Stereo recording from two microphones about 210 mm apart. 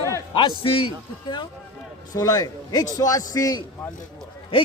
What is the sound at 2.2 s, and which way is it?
A man's voice, 15° left (ahead or behind).